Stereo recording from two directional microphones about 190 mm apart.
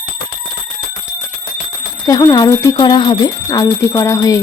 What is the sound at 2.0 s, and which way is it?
Speech, 20° left (ahead or behind).